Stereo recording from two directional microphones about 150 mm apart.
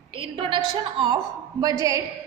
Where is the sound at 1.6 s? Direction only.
25° right (ahead or behind).